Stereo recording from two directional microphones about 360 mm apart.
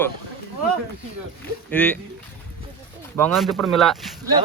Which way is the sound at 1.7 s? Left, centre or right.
Centre.